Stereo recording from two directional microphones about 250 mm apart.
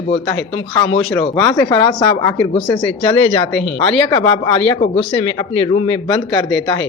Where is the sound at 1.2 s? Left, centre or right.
Centre.